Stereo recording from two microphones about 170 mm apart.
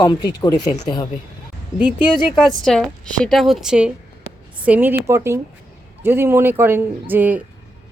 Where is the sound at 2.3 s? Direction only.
Centre (ahead or behind).